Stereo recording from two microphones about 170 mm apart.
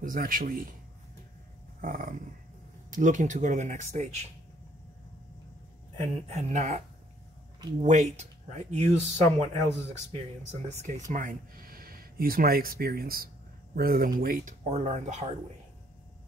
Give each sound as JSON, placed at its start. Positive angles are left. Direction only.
{"t": 0.0, "sound": "a man's voice", "side_deg": -55}
{"t": 1.8, "sound": "a man's voice", "side_deg": -55}
{"t": 6.3, "sound": "speech", "side_deg": -40}
{"t": 7.8, "sound": "speech", "side_deg": -45}
{"t": 11.1, "sound": "a man's voice", "side_deg": -55}